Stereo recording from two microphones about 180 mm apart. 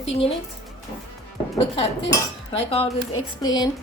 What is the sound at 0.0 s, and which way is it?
Speech, 35° left (ahead or behind).